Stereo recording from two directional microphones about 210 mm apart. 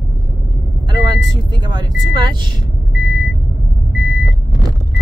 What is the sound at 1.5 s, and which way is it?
Speech, 20° right (ahead or behind).